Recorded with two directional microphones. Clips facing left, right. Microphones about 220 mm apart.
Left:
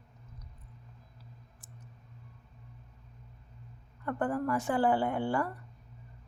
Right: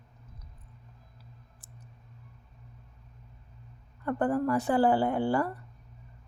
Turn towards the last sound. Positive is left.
turn(degrees=-35)  # may be behind; listen again after turning